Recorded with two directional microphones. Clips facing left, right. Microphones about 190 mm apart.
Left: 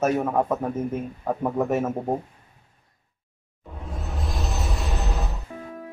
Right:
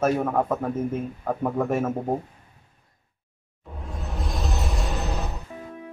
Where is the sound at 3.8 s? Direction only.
Centre (ahead or behind).